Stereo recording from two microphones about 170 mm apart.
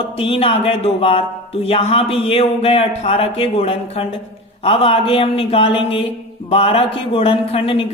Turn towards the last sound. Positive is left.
turn(degrees=35)  # may be behind; listen again after turning